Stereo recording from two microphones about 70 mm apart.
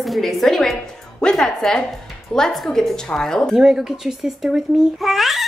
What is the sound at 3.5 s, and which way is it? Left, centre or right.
A woman's voice, centre.